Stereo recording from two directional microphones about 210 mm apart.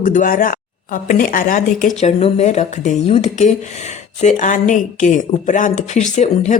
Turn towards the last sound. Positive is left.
turn(degrees=35)  # may be behind; listen again after turning